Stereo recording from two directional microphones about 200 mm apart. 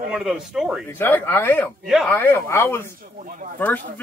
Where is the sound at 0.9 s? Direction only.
10° left (ahead or behind).